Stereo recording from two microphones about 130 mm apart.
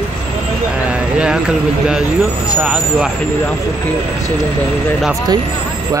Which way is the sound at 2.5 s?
5° right (ahead or behind).